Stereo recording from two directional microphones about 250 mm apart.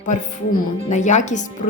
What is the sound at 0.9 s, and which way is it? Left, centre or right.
Speech, left.